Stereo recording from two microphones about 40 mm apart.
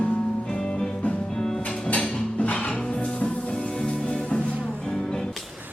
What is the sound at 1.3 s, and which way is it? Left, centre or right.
Music, centre.